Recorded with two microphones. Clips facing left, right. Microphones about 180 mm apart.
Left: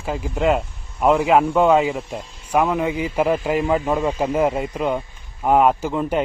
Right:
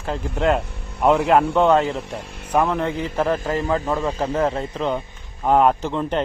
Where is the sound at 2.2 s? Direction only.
65° right (ahead or behind).